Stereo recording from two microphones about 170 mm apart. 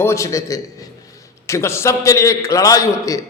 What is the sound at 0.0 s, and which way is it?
A man's voice, 15° left (ahead or behind).